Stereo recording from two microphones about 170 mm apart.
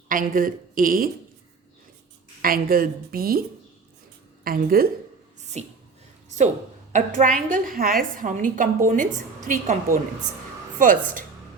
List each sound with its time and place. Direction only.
0.1 s speech: 55° right (ahead or behind)
2.4 s speech: 60° right (ahead or behind)
4.4 s speech: 60° right (ahead or behind)
5.4 s a sound: 40° right (ahead or behind)
6.9 s a woman's voice: 45° right (ahead or behind)